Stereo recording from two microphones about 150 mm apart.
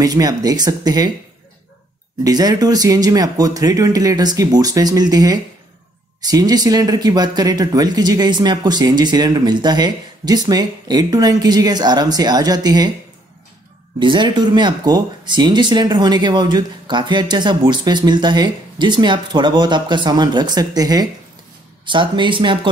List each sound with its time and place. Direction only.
0.0 s speech: 25° right (ahead or behind)
2.2 s speech: 25° right (ahead or behind)
13.9 s speech: 30° right (ahead or behind)